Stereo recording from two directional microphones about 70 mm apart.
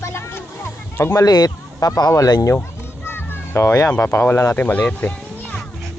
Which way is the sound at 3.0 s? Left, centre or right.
Left.